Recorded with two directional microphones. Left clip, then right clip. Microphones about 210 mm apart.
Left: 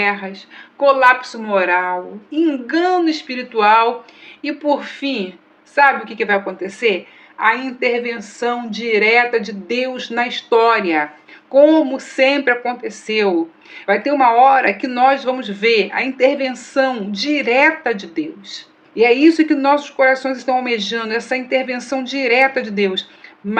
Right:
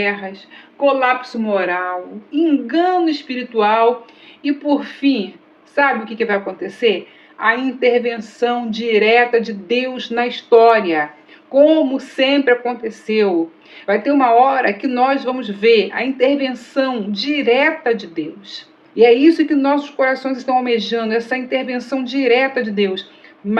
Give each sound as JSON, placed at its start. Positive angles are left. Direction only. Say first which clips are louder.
{"t": 0.0, "sound": "a man's voice", "louder": "left 2 dB", "side_deg": 35}